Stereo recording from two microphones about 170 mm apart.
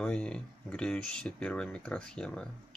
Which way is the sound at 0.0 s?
5° left (ahead or behind).